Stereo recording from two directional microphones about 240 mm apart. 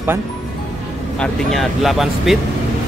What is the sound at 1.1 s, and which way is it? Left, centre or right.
Speech, centre.